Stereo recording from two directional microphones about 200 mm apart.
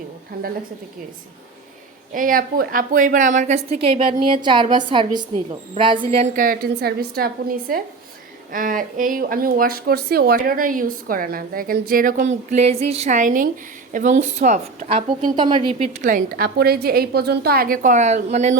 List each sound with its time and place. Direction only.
0.4 s speech: 50° right (ahead or behind)
2.1 s a woman's voice: 45° right (ahead or behind)
6.4 s a woman's voice: 45° right (ahead or behind)